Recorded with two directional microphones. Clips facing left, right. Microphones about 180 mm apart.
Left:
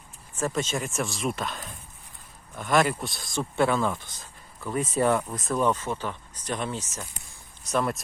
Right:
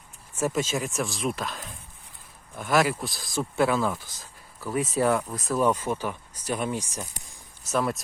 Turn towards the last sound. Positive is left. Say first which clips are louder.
# even
turn(degrees=0)  # may be behind; listen again after turning